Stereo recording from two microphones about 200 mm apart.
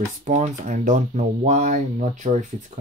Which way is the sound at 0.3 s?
40° right (ahead or behind).